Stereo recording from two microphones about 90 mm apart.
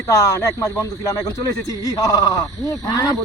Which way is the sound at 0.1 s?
35° left (ahead or behind).